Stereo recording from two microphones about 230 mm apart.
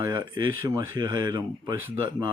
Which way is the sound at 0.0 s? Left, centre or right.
Centre.